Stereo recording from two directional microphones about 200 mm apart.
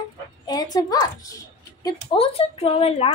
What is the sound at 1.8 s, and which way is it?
Speech, 20° left (ahead or behind).